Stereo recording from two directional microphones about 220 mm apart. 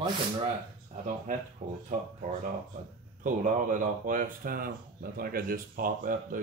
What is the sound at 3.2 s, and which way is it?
Speech, 35° right (ahead or behind).